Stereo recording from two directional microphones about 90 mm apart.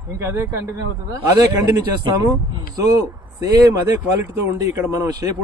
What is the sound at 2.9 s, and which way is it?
Speech, 40° right (ahead or behind).